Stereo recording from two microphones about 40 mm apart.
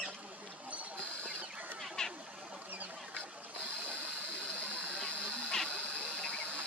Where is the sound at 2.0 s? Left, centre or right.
Centre.